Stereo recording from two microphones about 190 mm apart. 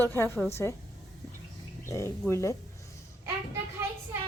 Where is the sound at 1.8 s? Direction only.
15° left (ahead or behind).